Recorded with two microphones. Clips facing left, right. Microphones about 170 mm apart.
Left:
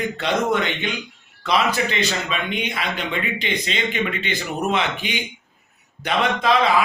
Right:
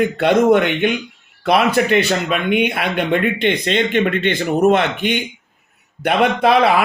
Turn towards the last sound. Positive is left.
turn(degrees=-60)  # may be behind; listen again after turning